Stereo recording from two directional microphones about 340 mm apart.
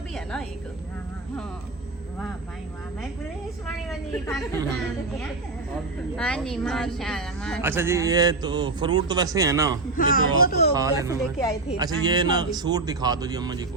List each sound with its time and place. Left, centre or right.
3.8 s a woman's voice: centre
6.1 s a woman's voice: centre
10.0 s speech: left
10.8 s a woman's voice: centre